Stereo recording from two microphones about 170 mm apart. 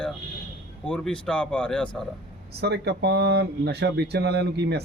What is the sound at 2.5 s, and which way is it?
Speech, 75° right (ahead or behind).